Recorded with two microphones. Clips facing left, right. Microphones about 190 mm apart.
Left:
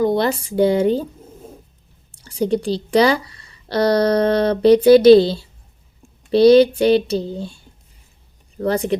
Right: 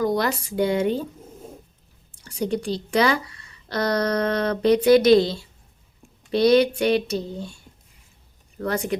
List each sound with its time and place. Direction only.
0.0 s speech: 25° left (ahead or behind)
2.2 s speech: 30° left (ahead or behind)